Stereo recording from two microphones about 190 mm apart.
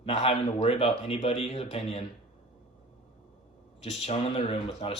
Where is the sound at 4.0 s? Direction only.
30° left (ahead or behind).